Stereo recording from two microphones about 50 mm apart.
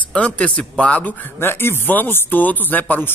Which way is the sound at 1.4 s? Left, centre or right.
Left.